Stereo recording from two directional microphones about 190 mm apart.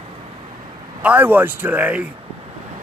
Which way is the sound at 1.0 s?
10° right (ahead or behind).